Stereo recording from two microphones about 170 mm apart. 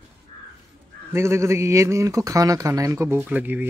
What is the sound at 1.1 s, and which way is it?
Speech, 15° right (ahead or behind).